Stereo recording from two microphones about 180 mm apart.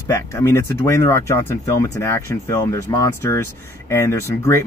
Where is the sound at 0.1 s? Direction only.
15° left (ahead or behind).